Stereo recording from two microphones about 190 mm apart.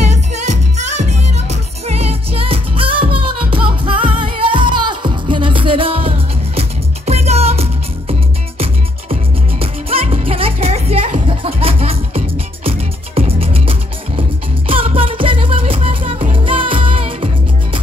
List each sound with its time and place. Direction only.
0.0 s music: 35° right (ahead or behind)